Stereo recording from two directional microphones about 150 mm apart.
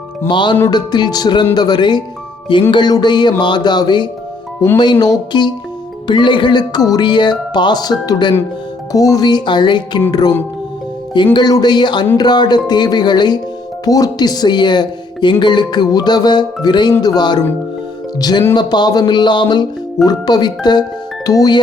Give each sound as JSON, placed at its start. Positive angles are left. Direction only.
{"t": 0.3, "sound": "speech", "side_deg": 30}
{"t": 11.3, "sound": "speech", "side_deg": 25}